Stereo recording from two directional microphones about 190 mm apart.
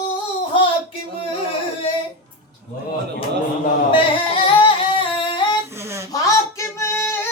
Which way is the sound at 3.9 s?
30° left (ahead or behind).